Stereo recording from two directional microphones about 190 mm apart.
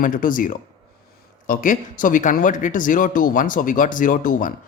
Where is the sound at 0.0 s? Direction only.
45° left (ahead or behind).